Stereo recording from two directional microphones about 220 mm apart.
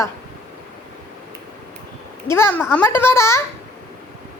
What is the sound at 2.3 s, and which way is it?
A woman's voice, 10° left (ahead or behind).